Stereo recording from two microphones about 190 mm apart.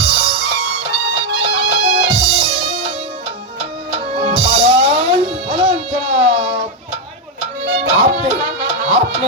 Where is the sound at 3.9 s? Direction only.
30° right (ahead or behind).